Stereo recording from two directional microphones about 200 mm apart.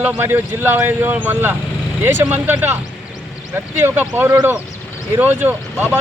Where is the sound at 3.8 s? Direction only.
10° right (ahead or behind).